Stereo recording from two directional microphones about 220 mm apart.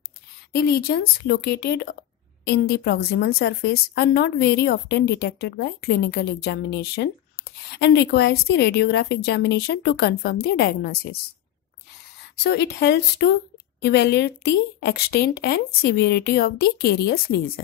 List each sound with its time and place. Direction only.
0.5 s a woman's voice: 45° left (ahead or behind)
12.4 s a woman's voice: 50° left (ahead or behind)